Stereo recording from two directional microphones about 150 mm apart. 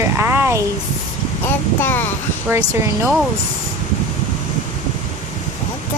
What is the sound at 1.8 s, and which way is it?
Speech, 15° left (ahead or behind).